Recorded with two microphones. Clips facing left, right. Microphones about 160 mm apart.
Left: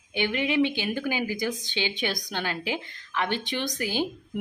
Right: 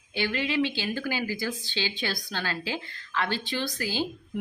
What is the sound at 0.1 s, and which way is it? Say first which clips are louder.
Speech: left 2 dB; 15° left (ahead or behind).